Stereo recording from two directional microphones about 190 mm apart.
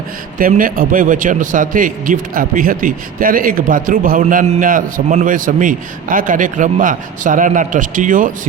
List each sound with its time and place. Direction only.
0.3 s a man's voice: 45° right (ahead or behind)